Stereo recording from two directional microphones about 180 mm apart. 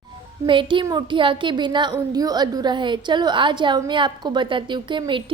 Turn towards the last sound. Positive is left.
turn(degrees=-25)  # may be behind; listen again after turning